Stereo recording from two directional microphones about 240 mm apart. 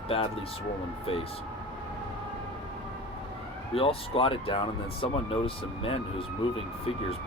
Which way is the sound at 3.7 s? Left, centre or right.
Left.